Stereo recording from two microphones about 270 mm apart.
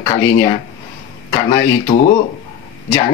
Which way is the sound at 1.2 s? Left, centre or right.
Centre.